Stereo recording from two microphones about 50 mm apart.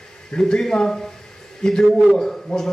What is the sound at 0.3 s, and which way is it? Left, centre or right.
A man's voice, centre.